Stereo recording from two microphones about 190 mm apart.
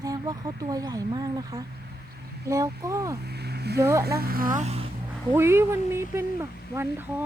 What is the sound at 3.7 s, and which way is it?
Speech, 15° right (ahead or behind).